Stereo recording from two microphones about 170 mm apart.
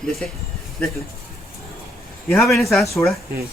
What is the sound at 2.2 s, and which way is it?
Speech, centre (ahead or behind).